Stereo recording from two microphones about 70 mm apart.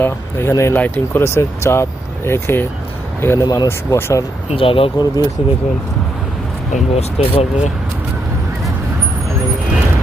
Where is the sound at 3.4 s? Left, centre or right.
Left.